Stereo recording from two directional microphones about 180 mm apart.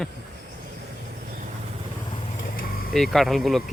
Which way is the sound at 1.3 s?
40° right (ahead or behind).